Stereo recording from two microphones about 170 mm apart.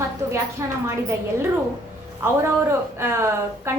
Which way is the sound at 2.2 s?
15° right (ahead or behind).